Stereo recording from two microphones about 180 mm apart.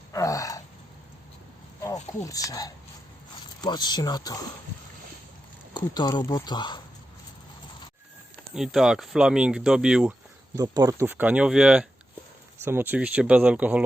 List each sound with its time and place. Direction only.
0.1 s gasp: 20° left (ahead or behind)
2.1 s speech: 20° left (ahead or behind)
5.7 s speech: 25° left (ahead or behind)
8.5 s speech: centre (ahead or behind)
10.5 s speech: 20° right (ahead or behind)